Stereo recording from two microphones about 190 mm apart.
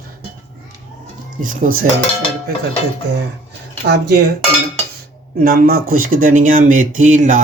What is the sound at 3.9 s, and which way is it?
Speech, 60° right (ahead or behind).